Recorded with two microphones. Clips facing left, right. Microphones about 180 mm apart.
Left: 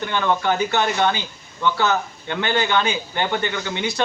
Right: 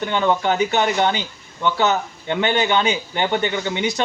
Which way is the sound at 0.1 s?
20° right (ahead or behind).